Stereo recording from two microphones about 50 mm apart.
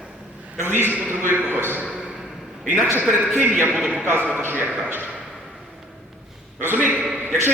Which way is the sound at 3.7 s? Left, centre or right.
Centre.